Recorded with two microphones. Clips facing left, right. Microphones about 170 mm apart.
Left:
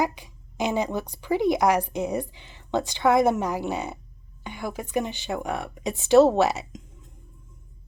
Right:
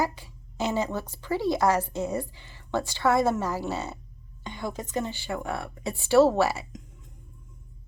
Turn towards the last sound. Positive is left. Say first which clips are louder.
# left 3 dB
turn(degrees=20)  # may be behind; listen again after turning